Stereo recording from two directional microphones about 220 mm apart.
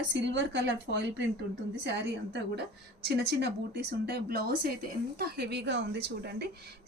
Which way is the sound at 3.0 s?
50° right (ahead or behind).